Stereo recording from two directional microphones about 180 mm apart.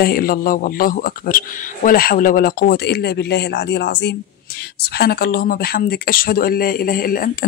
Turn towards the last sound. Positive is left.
turn(degrees=55)  # may be behind; listen again after turning